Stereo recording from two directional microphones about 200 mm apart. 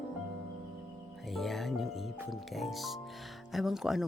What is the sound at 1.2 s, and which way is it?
Music, centre (ahead or behind).